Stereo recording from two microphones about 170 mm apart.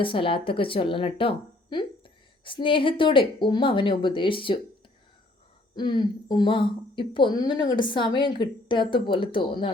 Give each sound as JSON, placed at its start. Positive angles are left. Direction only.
{"t": 0.0, "sound": "speech", "side_deg": 30}
{"t": 5.7, "sound": "speech", "side_deg": 25}